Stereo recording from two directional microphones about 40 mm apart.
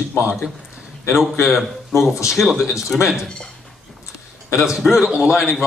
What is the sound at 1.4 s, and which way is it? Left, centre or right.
Speech, centre.